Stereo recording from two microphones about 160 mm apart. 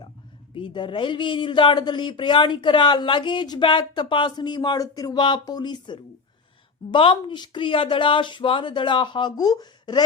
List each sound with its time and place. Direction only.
0.5 s a woman's voice: 30° left (ahead or behind)